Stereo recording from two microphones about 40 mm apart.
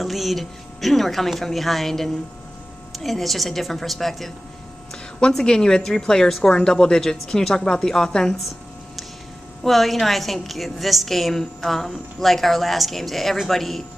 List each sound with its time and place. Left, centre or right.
0.0 s a woman's voice: centre
5.4 s a woman's voice: centre
9.6 s a woman's voice: centre